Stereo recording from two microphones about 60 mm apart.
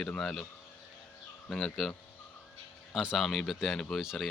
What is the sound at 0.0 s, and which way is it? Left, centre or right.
Speech, centre.